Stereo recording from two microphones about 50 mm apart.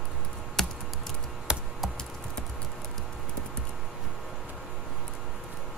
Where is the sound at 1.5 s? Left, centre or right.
Centre.